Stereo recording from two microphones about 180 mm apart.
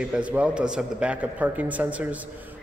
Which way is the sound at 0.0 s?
5° right (ahead or behind).